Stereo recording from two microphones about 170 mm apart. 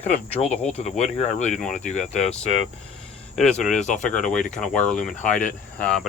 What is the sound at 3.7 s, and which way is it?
Speech, 45° left (ahead or behind).